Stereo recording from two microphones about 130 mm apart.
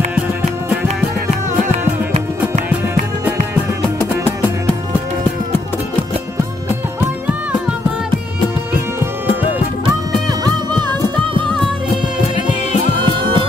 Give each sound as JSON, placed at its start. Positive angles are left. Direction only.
{"t": 1.7, "sound": "music", "side_deg": -60}
{"t": 10.4, "sound": "music", "side_deg": -35}
{"t": 13.2, "sound": "music", "side_deg": -40}